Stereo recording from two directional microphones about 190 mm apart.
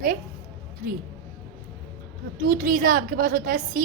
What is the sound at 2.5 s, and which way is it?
Speech, 50° right (ahead or behind).